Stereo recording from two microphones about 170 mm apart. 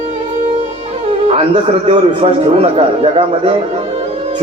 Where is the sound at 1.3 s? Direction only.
40° right (ahead or behind).